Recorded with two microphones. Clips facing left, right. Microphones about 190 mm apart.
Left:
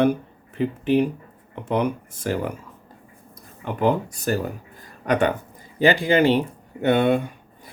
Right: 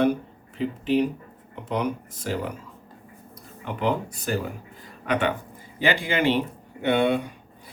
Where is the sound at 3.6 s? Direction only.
45° left (ahead or behind).